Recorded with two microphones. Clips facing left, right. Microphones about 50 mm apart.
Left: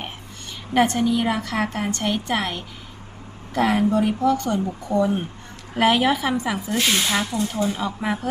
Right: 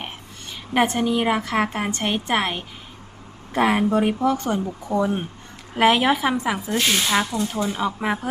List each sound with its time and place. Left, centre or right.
0.7 s a woman's voice: centre
4.9 s a woman's voice: centre